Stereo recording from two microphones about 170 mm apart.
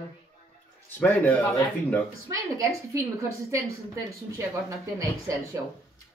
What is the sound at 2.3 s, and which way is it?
A woman's voice, 20° right (ahead or behind).